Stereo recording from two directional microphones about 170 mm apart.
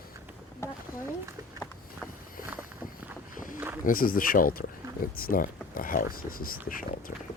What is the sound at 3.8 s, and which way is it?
Speech, 55° left (ahead or behind).